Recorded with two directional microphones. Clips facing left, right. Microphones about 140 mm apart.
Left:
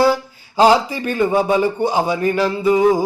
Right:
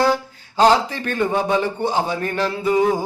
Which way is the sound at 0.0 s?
10° left (ahead or behind).